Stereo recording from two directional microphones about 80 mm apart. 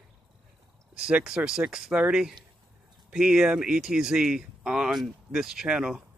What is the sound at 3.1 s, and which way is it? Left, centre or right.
Speech, centre.